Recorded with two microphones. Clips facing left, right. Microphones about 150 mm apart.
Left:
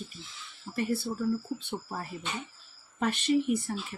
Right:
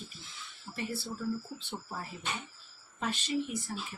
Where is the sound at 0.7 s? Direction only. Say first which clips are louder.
Left 8 dB; 55° left (ahead or behind).